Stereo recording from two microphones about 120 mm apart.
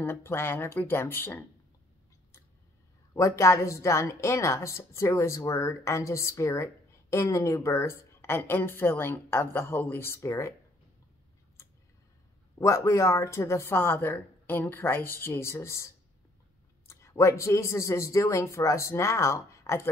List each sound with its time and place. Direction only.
0.0 s a woman's voice: 20° left (ahead or behind)
3.2 s a woman's voice: 25° left (ahead or behind)
12.5 s a woman's voice: 25° left (ahead or behind)